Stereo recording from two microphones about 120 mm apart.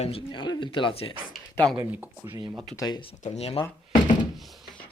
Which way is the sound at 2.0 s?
15° right (ahead or behind).